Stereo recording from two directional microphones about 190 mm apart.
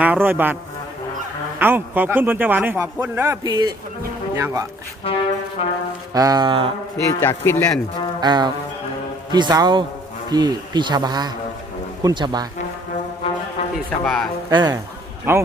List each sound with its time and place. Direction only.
0.0 s a man's voice: 10° right (ahead or behind)
1.5 s a man's voice: 10° right (ahead or behind)
5.0 s speech: 30° left (ahead or behind)
6.1 s a man's voice: 20° right (ahead or behind)
7.2 s speech: 10° left (ahead or behind)
8.2 s a man's voice: 20° right (ahead or behind)
14.0 s speech: centre (ahead or behind)
14.5 s a man's voice: 20° right (ahead or behind)
15.3 s a man's voice: 10° right (ahead or behind)